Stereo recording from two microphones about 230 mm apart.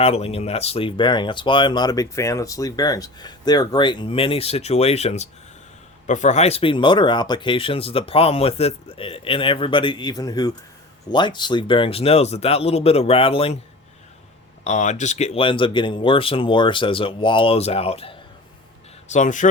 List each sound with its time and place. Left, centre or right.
0.0 s speech: left
14.6 s speech: left